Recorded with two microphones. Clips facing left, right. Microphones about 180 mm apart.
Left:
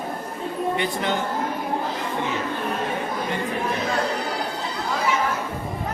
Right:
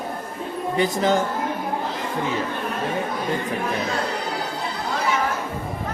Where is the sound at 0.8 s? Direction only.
40° right (ahead or behind).